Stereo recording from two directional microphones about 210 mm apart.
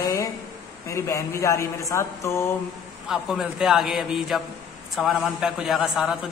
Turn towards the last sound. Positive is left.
turn(degrees=0)  # may be behind; listen again after turning